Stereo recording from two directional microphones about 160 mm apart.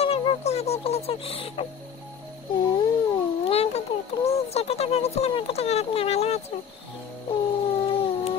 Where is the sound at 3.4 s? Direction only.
40° left (ahead or behind).